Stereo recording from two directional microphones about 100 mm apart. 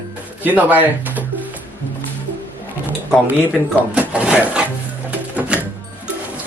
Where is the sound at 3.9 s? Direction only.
10° right (ahead or behind).